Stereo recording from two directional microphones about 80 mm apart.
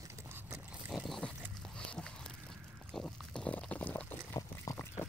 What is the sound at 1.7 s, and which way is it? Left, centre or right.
Horse, centre.